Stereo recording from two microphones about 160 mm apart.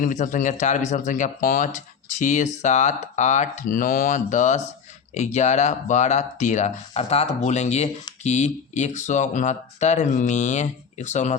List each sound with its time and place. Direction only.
0.0 s speech: 50° left (ahead or behind)